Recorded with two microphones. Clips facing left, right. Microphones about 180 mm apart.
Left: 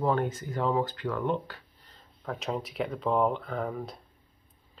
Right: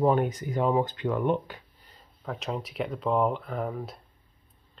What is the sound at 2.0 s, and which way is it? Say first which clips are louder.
Speech: even; centre (ahead or behind).